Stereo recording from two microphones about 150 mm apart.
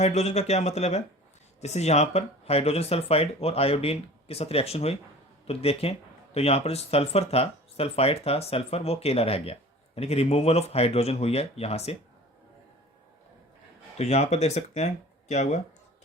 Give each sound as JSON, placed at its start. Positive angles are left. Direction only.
{"t": 0.0, "sound": "speech", "side_deg": 45}
{"t": 14.0, "sound": "speech", "side_deg": 50}